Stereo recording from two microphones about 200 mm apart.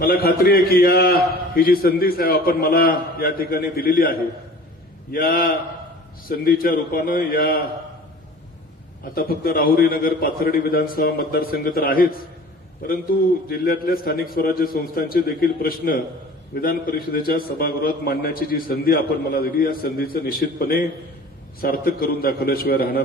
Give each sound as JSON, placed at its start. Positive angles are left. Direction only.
{"t": 0.0, "sound": "a man's voice", "side_deg": 50}
{"t": 9.1, "sound": "a man's voice", "side_deg": 50}
{"t": 13.5, "sound": "a man's voice", "side_deg": 50}